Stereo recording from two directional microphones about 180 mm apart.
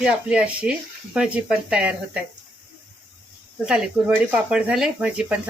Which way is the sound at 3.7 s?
5° right (ahead or behind).